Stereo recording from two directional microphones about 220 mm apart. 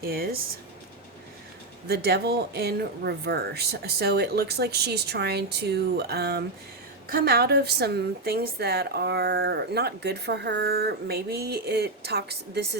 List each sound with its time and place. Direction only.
0.0 s a woman's voice: 45° right (ahead or behind)
1.9 s a woman's voice: 45° right (ahead or behind)